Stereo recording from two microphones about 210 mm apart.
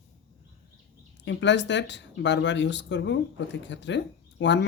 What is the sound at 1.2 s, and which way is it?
Speech, 55° left (ahead or behind).